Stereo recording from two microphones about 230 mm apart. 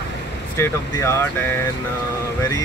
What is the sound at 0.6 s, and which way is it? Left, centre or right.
Speech, centre.